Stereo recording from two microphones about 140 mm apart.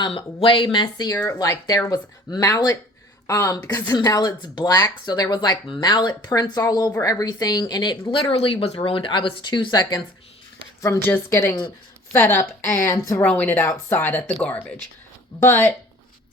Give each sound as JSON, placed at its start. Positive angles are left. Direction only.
{"t": 0.0, "sound": "speech", "side_deg": 40}
{"t": 10.8, "sound": "speech", "side_deg": 20}
{"t": 13.2, "sound": "speech", "side_deg": 10}